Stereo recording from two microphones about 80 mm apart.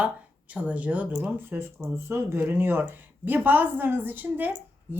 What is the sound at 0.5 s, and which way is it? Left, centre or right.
A woman's voice, centre.